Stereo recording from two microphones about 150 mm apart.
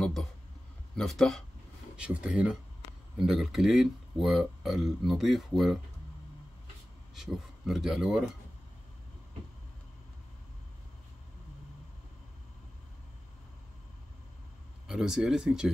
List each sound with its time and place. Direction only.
0.0 s a sound: centre (ahead or behind)
0.9 s speech: centre (ahead or behind)
7.2 s speech: centre (ahead or behind)
14.9 s speech: 5° right (ahead or behind)